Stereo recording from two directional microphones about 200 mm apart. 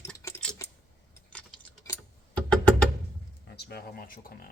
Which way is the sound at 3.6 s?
55° left (ahead or behind).